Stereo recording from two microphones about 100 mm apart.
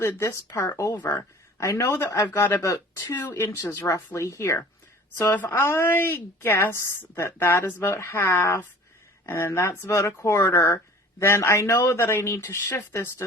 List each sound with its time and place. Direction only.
0.0 s a man's voice: 25° left (ahead or behind)